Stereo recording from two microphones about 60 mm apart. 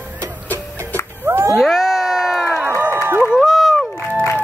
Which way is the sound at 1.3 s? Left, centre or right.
Right.